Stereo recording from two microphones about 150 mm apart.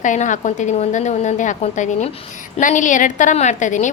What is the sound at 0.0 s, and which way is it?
A woman's voice, 55° left (ahead or behind).